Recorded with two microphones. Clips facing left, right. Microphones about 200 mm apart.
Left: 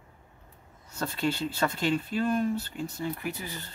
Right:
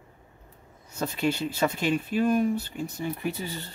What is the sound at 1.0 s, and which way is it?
Speech, 15° right (ahead or behind).